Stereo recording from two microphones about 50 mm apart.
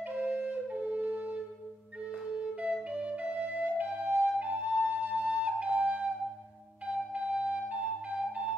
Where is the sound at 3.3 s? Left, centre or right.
Right.